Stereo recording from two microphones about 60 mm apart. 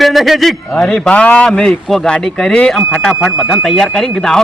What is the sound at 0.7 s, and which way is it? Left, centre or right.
A man's voice, centre.